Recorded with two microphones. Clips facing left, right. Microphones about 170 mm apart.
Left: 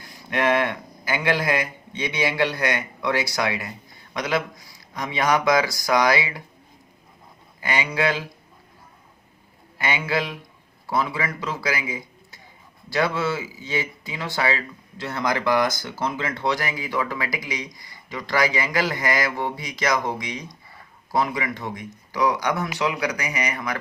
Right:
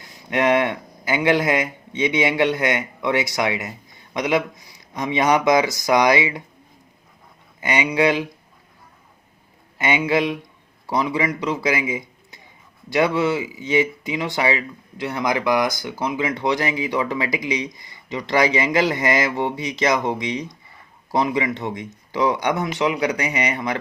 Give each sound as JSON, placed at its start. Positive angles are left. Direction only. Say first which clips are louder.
{"t": 0.3, "sound": "a man's voice", "louder": "right 3 dB", "side_deg": -20}
{"t": 7.6, "sound": "speech", "louder": "right 5 dB", "side_deg": -20}
{"t": 9.7, "sound": "a man's voice", "louder": "right 5 dB", "side_deg": -20}